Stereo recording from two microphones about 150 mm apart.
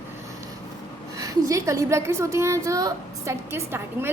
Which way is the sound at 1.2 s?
25° right (ahead or behind).